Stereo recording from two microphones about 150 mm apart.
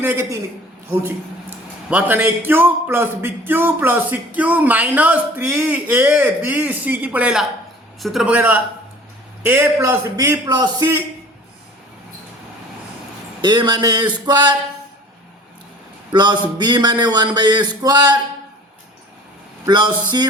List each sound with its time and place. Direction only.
0.0 s a man's voice: 15° right (ahead or behind)
1.9 s a man's voice: 10° right (ahead or behind)
13.4 s speech: 30° right (ahead or behind)
16.1 s speech: 30° right (ahead or behind)
19.6 s speech: 30° right (ahead or behind)